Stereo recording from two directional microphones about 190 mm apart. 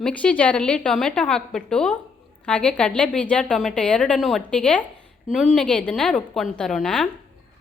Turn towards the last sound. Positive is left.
turn(degrees=5)  # may be behind; listen again after turning